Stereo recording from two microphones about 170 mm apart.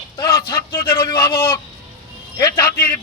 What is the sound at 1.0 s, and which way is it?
Speech, 30° left (ahead or behind).